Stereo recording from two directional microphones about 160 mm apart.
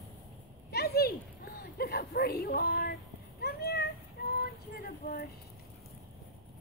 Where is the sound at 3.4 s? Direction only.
85° left.